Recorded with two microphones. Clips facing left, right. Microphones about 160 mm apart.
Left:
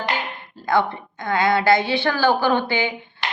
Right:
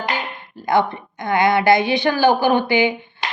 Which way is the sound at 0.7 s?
20° right (ahead or behind).